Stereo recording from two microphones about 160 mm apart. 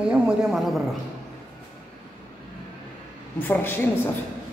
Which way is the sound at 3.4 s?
10° left (ahead or behind).